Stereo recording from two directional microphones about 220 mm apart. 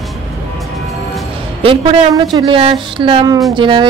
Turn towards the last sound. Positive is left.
turn(degrees=-20)  # may be behind; listen again after turning